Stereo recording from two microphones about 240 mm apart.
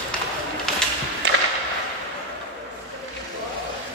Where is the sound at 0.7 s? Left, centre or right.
Centre.